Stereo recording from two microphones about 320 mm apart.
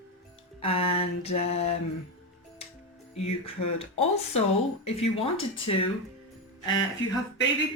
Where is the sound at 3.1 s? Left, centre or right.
Centre.